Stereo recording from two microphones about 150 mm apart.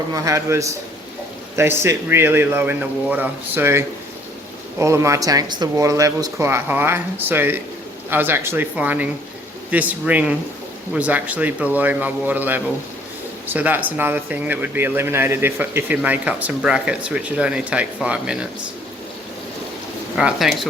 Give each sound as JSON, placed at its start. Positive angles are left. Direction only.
{"t": 0.1, "sound": "speech", "side_deg": -20}
{"t": 20.1, "sound": "speech", "side_deg": 0}